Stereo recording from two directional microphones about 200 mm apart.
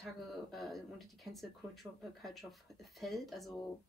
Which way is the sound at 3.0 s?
Centre (ahead or behind).